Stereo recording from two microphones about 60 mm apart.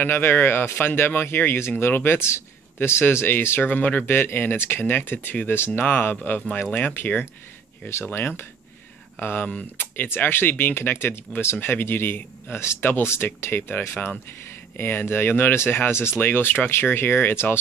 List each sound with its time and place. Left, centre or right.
0.0 s speech: left